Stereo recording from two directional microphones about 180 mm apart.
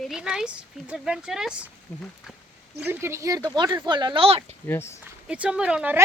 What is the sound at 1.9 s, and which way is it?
Speech, 10° left (ahead or behind).